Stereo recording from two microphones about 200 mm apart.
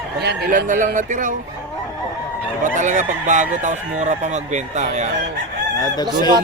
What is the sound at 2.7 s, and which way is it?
Speech, 40° right (ahead or behind).